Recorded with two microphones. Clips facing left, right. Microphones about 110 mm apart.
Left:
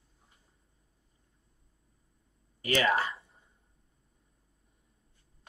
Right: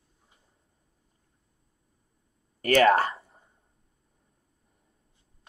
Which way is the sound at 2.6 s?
50° right (ahead or behind).